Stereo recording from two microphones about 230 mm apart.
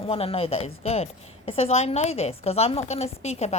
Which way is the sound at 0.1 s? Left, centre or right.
Left.